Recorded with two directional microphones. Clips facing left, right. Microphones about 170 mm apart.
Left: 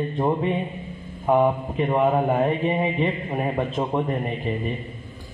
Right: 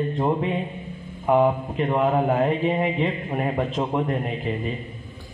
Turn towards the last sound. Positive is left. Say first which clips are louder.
# even
turn(degrees=0)  # may be behind; listen again after turning